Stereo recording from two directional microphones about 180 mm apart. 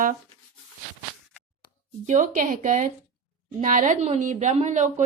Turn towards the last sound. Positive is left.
turn(degrees=-40)  # may be behind; listen again after turning